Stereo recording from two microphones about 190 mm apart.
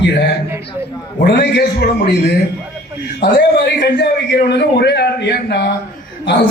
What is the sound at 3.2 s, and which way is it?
A man's voice, 60° left (ahead or behind).